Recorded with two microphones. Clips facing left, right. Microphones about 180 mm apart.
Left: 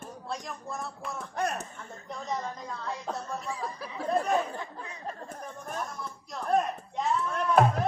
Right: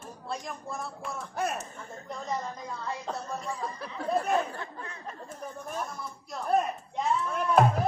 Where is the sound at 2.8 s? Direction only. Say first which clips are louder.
Even; centre (ahead or behind).